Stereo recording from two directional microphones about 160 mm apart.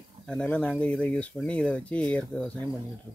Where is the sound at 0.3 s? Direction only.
5° left (ahead or behind).